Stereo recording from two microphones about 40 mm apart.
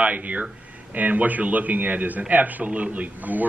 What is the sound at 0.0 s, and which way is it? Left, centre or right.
A man's voice, right.